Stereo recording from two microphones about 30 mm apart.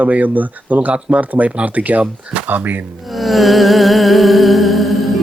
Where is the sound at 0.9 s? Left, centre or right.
Right.